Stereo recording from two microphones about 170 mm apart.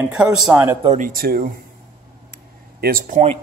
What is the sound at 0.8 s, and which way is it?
Speech, 50° right (ahead or behind).